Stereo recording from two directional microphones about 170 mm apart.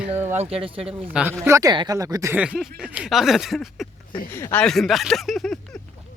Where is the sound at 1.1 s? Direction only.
10° right (ahead or behind).